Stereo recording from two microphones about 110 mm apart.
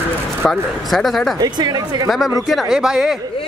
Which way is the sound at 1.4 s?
40° right (ahead or behind).